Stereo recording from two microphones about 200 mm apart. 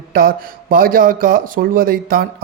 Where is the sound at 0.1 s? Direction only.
45° right (ahead or behind).